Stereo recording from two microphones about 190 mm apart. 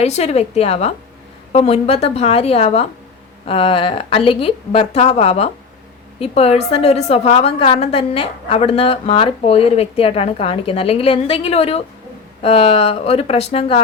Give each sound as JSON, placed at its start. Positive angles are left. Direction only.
{"t": 0.0, "sound": "a woman's voice", "side_deg": 35}